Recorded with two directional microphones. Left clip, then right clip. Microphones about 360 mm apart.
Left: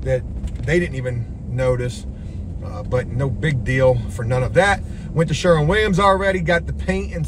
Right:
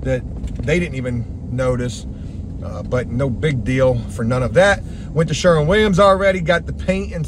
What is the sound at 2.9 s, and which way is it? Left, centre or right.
A man's voice, centre.